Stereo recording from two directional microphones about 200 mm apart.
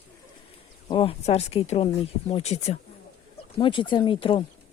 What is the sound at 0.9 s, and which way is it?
Speech, 25° left (ahead or behind).